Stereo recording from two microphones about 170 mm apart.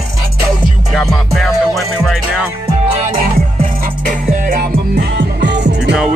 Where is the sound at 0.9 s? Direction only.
Centre (ahead or behind).